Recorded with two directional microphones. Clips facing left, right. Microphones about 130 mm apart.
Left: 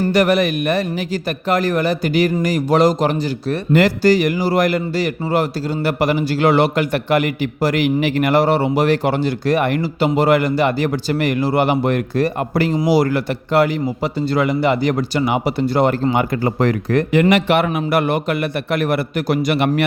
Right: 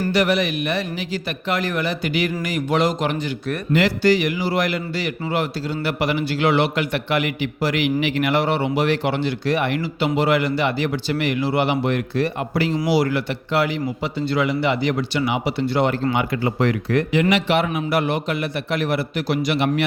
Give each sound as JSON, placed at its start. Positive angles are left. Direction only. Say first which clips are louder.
{"t": 0.1, "sound": "a man's voice", "louder": "left 4 dB", "side_deg": 45}